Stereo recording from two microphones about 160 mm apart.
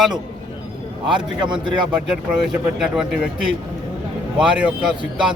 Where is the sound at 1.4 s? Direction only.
30° right (ahead or behind).